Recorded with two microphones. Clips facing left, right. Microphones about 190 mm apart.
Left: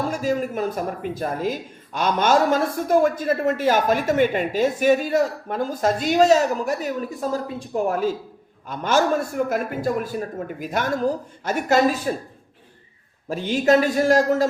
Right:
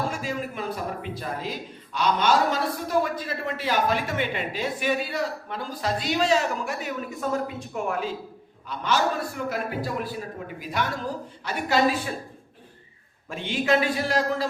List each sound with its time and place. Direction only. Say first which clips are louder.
0.1 s a man's voice: left 8 dB; 40° left (ahead or behind)
13.2 s a man's voice: left 6 dB; 40° left (ahead or behind)